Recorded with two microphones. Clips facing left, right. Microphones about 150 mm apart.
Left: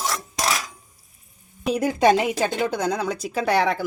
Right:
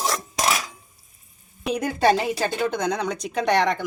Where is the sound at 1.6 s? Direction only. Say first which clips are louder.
Left 2 dB; 5° left (ahead or behind).